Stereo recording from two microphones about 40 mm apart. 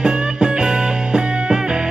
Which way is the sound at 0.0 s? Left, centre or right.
Right.